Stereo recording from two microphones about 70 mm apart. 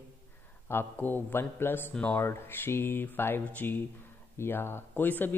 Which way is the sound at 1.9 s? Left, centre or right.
Centre.